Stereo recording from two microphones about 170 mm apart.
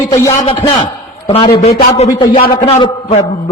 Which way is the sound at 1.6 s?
40° left (ahead or behind).